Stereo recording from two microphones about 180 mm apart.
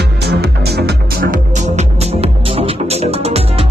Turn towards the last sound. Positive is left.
turn(degrees=-35)  # may be behind; listen again after turning